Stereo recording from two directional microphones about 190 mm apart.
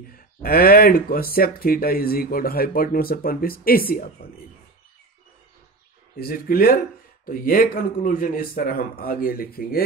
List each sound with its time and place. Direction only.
0.1 s speech: 50° left (ahead or behind)
6.1 s speech: 50° left (ahead or behind)